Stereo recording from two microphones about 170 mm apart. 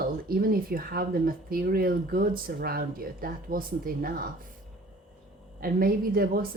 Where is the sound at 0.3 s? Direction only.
60° right (ahead or behind).